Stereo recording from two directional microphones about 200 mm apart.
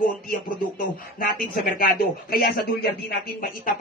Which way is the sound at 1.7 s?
50° left (ahead or behind).